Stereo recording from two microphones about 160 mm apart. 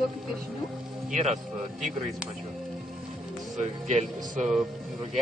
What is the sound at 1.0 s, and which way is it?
Speech, 50° right (ahead or behind).